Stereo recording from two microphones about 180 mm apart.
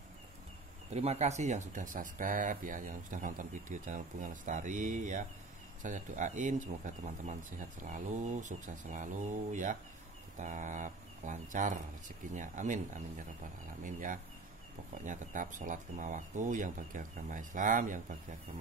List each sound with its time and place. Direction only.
0.9 s speech: 35° right (ahead or behind)